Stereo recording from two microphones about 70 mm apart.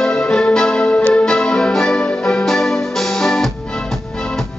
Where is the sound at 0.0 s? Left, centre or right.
Centre.